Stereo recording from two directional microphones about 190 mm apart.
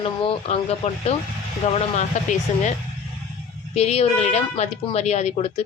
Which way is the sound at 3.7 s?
35° left (ahead or behind).